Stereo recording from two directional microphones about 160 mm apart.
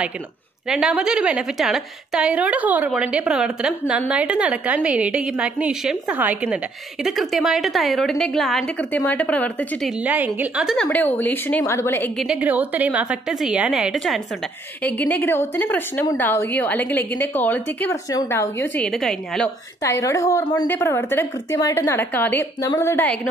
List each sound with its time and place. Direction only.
0.7 s a woman's voice: 5° right (ahead or behind)
9.8 s a woman's voice: 10° right (ahead or behind)
10.9 s a woman's voice: 10° left (ahead or behind)
12.2 s a woman's voice: 5° right (ahead or behind)
19.8 s a woman's voice: 20° left (ahead or behind)